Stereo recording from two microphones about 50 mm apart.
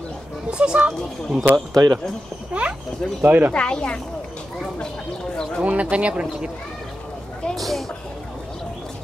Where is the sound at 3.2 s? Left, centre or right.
Right.